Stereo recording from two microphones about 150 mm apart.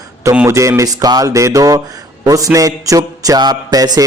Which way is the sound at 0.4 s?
20° right (ahead or behind).